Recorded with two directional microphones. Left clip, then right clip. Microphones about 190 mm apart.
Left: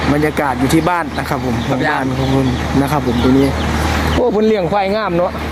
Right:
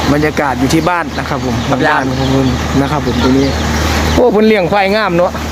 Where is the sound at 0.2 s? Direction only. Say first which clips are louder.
Right 2 dB; centre (ahead or behind).